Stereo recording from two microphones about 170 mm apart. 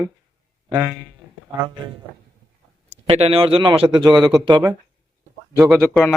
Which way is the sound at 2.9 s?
35° right (ahead or behind).